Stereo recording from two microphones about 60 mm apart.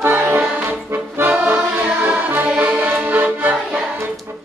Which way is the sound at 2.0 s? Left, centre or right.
Right.